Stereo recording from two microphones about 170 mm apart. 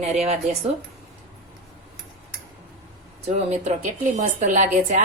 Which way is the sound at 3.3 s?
40° right (ahead or behind).